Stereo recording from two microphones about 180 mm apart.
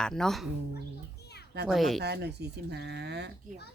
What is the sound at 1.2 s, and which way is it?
Children playing, 65° left (ahead or behind).